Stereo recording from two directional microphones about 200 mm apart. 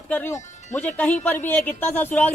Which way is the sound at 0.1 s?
10° left (ahead or behind).